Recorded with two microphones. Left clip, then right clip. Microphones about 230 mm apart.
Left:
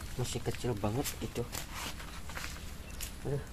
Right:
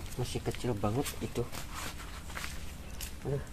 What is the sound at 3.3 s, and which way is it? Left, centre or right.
Speech, centre.